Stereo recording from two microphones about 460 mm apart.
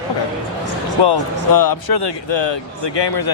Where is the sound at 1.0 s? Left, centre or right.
Left.